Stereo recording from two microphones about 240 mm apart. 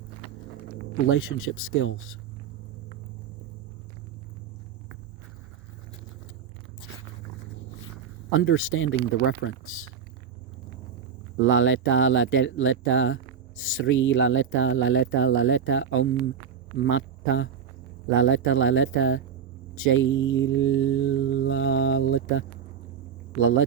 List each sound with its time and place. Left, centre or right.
1.1 s speech: left
8.3 s speech: left
11.4 s mantra: left
16.7 s a man's voice: left
19.7 s mantra: left
23.4 s speech: left